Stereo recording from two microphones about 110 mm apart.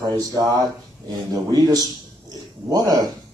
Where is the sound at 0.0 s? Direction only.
35° right (ahead or behind).